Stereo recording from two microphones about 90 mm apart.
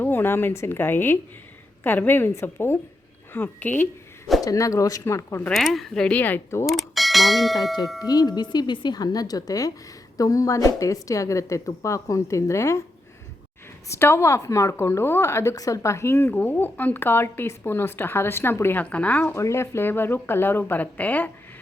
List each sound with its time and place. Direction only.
0.0 s a woman's voice: 25° left (ahead or behind)
4.4 s a woman's voice: 40° left (ahead or behind)
5.5 s speech: centre (ahead or behind)
6.1 s a woman's voice: 20° left (ahead or behind)
6.7 s speech: centre (ahead or behind)
8.0 s a woman's voice: 45° left (ahead or behind)
13.8 s a woman's voice: 30° left (ahead or behind)
18.8 s speech: 15° left (ahead or behind)
19.3 s a woman's voice: 30° left (ahead or behind)